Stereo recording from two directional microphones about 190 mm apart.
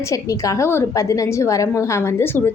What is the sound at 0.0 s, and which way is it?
A woman's voice, 15° left (ahead or behind).